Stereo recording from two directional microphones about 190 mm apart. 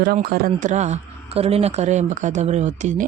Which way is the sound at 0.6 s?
40° right (ahead or behind).